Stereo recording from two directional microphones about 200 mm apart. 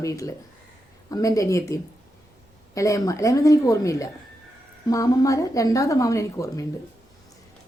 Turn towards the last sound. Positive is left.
turn(degrees=15)  # may be behind; listen again after turning